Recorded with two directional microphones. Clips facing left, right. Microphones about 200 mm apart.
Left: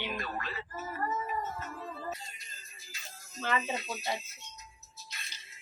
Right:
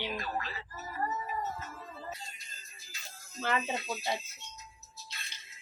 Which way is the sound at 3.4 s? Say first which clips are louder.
Even; 15° right (ahead or behind).